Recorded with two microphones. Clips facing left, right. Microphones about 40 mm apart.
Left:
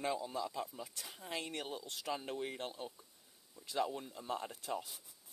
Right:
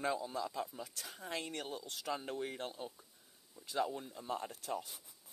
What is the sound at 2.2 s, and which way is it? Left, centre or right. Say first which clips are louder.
Speech: even; centre.